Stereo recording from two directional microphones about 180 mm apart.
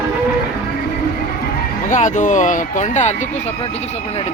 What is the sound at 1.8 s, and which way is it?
Speech, 45° left (ahead or behind).